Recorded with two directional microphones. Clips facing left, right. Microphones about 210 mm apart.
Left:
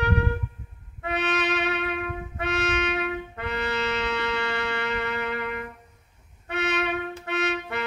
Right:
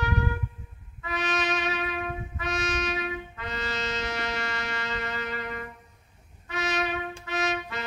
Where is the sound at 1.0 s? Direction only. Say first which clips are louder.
Left 3 dB; 65° left (ahead or behind).